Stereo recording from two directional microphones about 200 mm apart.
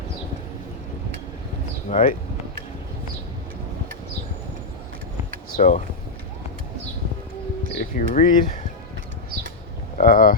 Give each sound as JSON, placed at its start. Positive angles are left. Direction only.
{"t": 1.9, "sound": "speech", "side_deg": 40}
{"t": 5.5, "sound": "speech", "side_deg": 40}
{"t": 7.8, "sound": "speech", "side_deg": 40}
{"t": 10.0, "sound": "speech", "side_deg": 45}